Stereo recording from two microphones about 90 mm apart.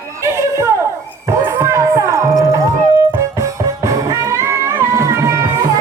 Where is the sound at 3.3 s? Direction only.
35° right (ahead or behind).